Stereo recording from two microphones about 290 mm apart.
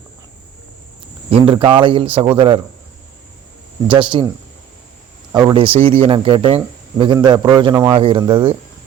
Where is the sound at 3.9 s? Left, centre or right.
Centre.